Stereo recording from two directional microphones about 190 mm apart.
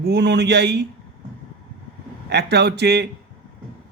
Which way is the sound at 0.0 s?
65° right (ahead or behind).